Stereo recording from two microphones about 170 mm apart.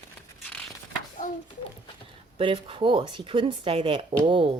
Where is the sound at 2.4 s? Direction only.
30° right (ahead or behind).